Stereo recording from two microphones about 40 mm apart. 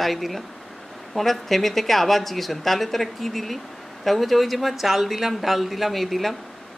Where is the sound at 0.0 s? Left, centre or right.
Centre.